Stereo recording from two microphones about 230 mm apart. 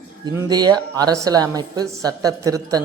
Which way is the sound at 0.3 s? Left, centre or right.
Centre.